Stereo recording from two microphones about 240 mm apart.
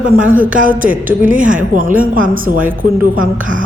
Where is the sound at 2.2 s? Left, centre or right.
Right.